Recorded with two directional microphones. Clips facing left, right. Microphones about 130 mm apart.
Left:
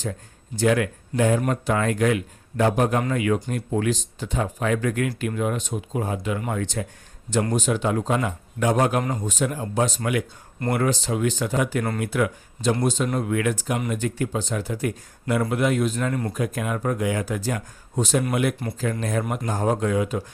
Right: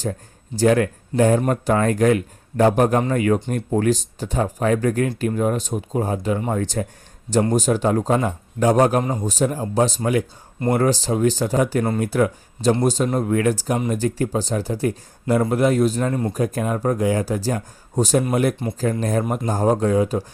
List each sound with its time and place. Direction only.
0.0 s speech: 40° right (ahead or behind)